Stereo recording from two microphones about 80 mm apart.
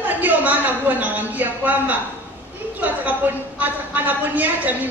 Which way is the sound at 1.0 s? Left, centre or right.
Right.